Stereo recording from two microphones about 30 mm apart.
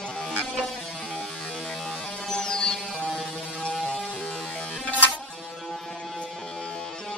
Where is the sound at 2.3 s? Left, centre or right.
Left.